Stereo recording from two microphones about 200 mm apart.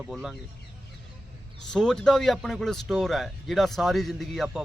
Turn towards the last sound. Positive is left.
turn(degrees=0)  # may be behind; listen again after turning